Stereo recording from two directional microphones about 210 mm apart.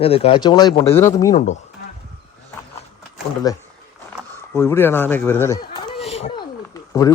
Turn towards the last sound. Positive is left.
turn(degrees=15)  # may be behind; listen again after turning